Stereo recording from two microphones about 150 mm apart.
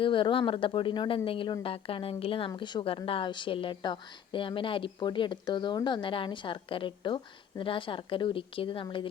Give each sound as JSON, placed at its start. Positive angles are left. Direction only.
{"t": 0.0, "sound": "a woman's voice", "side_deg": 35}